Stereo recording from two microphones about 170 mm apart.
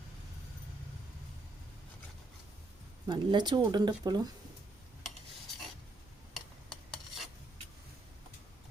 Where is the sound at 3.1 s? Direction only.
25° right (ahead or behind).